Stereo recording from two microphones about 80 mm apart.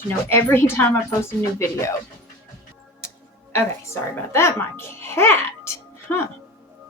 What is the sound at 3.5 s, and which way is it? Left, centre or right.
Speech, left.